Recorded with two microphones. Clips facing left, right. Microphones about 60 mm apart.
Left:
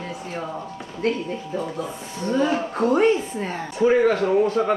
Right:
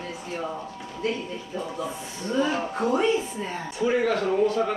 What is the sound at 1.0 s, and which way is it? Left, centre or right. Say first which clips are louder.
Speech: left 5 dB; left.